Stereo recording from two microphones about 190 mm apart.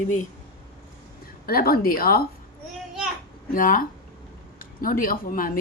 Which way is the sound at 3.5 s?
45° left (ahead or behind).